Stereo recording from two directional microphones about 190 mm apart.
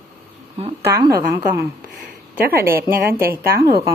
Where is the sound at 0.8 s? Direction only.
20° right (ahead or behind).